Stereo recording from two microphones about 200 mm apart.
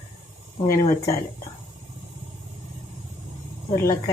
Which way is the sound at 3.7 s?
15° left (ahead or behind).